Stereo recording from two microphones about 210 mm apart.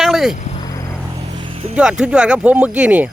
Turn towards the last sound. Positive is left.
turn(degrees=-5)  # may be behind; listen again after turning